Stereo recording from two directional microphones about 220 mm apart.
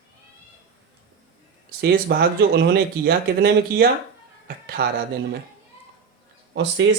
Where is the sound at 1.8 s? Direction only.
45° right (ahead or behind).